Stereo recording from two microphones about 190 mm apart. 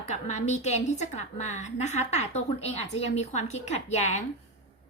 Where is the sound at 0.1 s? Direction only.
40° left (ahead or behind).